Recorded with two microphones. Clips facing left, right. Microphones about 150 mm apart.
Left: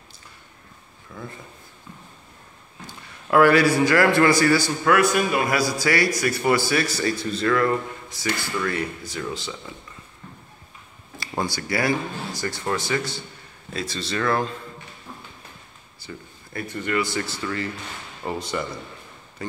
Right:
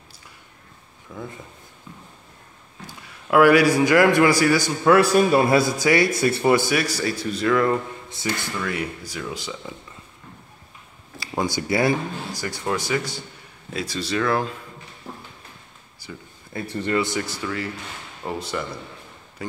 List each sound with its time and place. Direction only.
1.1 s a man's voice: 20° right (ahead or behind)
2.9 s a man's voice: 10° right (ahead or behind)
4.9 s a man's voice: 35° right (ahead or behind)
8.6 s speech: 10° right (ahead or behind)
11.4 s speech: 20° right (ahead or behind)
16.0 s speech: 15° right (ahead or behind)
16.5 s a man's voice: 30° right (ahead or behind)
18.2 s speech: centre (ahead or behind)